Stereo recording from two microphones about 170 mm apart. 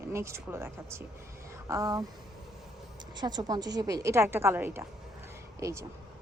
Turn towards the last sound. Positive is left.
turn(degrees=-15)  # may be behind; listen again after turning